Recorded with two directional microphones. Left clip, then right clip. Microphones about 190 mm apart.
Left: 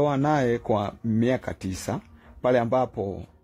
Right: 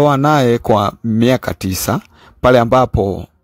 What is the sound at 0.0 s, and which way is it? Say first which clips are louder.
Speech: right 11 dB; 40° right (ahead or behind).